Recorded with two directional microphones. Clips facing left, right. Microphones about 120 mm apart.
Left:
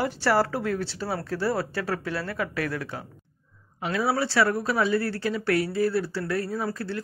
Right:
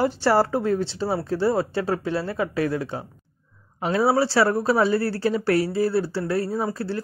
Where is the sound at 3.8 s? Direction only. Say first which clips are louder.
Right 5 dB; 35° right (ahead or behind).